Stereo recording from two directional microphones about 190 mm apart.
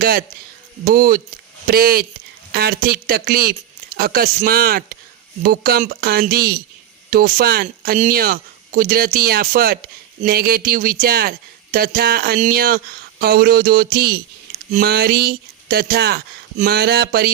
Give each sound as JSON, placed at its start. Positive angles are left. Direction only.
{"t": 0.0, "sound": "speech", "side_deg": -50}